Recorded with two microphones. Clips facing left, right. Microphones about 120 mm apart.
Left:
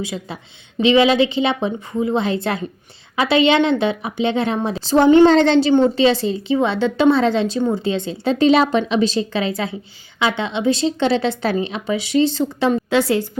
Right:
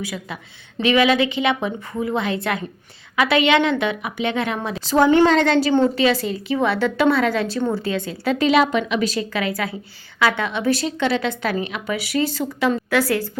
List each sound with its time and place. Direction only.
0.0 s a woman's voice: 25° left (ahead or behind)